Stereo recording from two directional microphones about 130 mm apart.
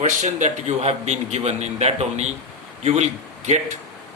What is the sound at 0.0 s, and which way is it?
A man's voice, 70° right (ahead or behind).